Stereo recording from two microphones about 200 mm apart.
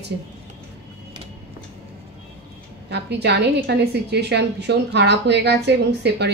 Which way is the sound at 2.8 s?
55° right (ahead or behind).